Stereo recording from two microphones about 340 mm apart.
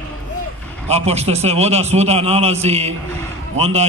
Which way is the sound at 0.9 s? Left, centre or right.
Centre.